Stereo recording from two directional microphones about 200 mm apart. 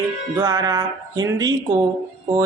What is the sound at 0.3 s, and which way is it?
Speech, 15° right (ahead or behind).